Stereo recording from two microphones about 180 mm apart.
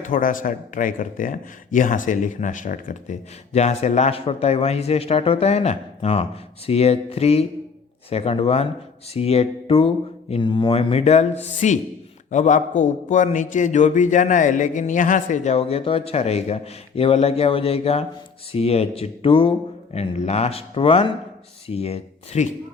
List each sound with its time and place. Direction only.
0.0 s speech: 50° left (ahead or behind)